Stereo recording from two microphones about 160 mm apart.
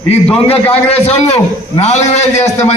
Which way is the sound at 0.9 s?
40° left (ahead or behind).